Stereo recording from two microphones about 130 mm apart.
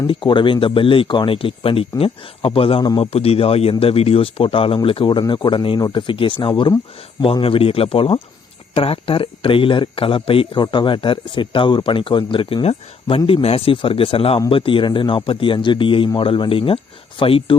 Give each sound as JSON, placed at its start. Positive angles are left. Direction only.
{"t": 0.1, "sound": "a man's voice", "side_deg": 40}